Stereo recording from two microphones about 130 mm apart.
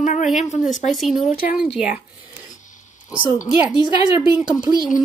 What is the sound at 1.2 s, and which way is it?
Speech, 90° left.